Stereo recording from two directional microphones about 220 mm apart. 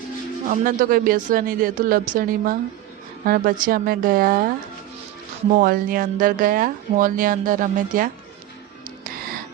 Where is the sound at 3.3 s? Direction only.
40° right (ahead or behind).